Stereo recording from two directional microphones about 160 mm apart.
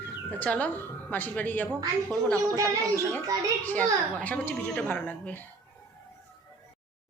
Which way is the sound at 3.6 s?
10° left (ahead or behind).